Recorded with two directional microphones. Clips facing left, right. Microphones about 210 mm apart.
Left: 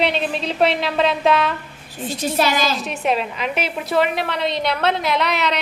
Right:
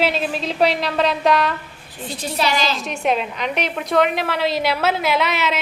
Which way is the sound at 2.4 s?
50° left (ahead or behind).